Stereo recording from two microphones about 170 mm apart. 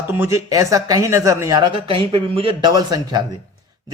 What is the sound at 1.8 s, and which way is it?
A man's voice, 30° right (ahead or behind).